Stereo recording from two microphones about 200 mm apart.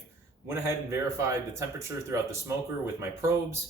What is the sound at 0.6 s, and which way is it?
Speech, 15° right (ahead or behind).